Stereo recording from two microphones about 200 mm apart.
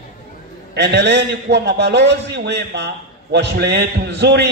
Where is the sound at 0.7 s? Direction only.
55° right (ahead or behind).